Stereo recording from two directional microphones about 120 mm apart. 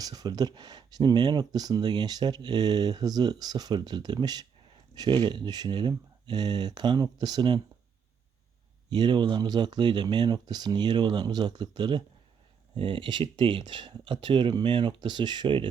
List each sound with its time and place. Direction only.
0.0 s speech: 35° right (ahead or behind)
8.9 s speech: 40° right (ahead or behind)